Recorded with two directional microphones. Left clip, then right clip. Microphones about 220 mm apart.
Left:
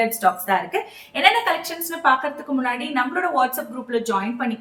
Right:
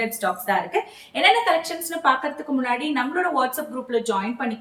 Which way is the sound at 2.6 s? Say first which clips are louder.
Left 1 dB; 15° left (ahead or behind).